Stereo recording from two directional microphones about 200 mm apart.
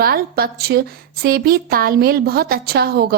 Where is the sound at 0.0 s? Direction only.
50° right (ahead or behind).